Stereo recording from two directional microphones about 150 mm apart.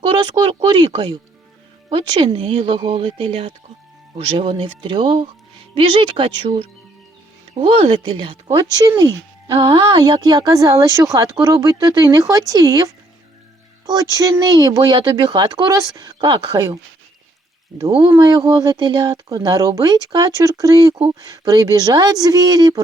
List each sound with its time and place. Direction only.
0.0 s speech: 30° right (ahead or behind)
13.8 s speech: 25° right (ahead or behind)
17.9 s speech: 30° right (ahead or behind)